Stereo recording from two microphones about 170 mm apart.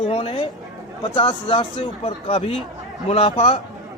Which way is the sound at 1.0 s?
30° left (ahead or behind).